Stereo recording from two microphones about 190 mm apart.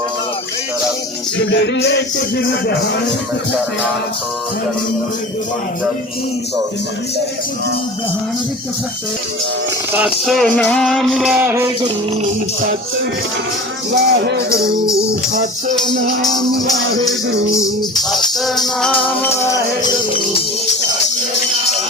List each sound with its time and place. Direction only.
1.5 s music: 65° left (ahead or behind)
9.9 s music: 5° right (ahead or behind)
13.9 s music: 65° right (ahead or behind)
17.5 s music: 15° left (ahead or behind)